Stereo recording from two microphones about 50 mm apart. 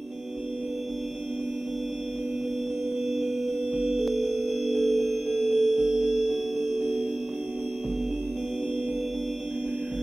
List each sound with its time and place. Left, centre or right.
3.7 s music: centre